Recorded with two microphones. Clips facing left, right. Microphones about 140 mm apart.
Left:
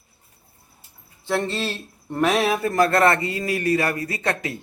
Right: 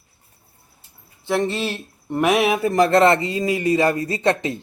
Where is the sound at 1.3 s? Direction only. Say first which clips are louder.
Right 3 dB; 15° right (ahead or behind).